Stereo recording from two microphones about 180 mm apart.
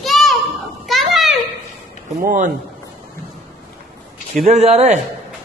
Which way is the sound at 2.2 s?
45° right (ahead or behind).